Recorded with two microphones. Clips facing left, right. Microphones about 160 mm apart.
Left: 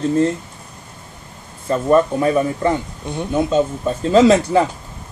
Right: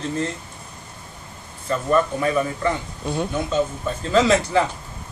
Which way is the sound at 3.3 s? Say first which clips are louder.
Left 7 dB; 50° left (ahead or behind).